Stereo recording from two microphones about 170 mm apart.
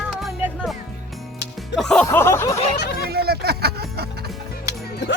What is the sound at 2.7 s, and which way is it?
Speech, 80° left.